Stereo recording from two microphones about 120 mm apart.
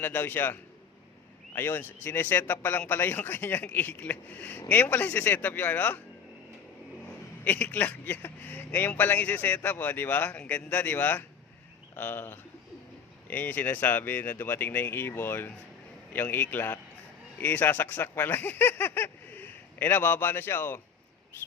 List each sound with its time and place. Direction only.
0.0 s speech: 15° left (ahead or behind)
7.4 s speech: 10° left (ahead or behind)